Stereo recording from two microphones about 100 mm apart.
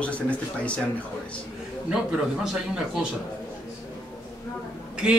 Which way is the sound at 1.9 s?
5° right (ahead or behind).